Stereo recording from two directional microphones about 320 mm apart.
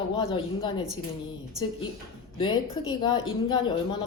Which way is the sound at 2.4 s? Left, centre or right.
Centre.